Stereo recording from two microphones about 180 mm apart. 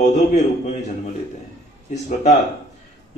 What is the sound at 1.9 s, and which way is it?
Speech, 40° left (ahead or behind).